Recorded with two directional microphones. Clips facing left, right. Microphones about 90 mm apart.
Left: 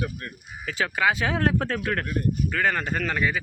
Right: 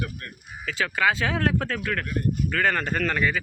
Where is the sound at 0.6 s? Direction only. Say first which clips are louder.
Even; 20° left (ahead or behind).